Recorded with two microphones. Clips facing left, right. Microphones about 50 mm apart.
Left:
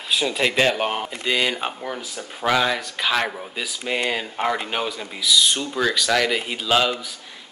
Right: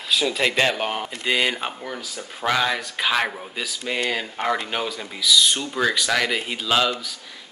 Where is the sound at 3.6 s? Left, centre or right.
Centre.